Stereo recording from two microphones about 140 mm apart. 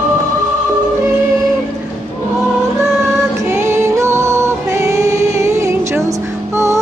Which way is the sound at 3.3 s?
20° right (ahead or behind).